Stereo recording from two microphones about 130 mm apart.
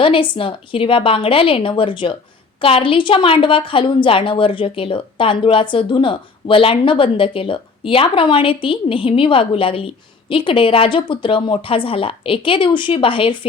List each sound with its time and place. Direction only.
0.0 s a woman's voice: 40° left (ahead or behind)